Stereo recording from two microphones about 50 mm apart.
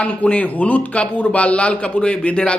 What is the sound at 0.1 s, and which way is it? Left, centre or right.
A man's voice, left.